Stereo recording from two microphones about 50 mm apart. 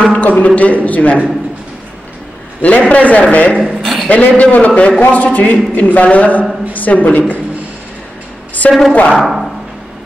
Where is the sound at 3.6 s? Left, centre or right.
Centre.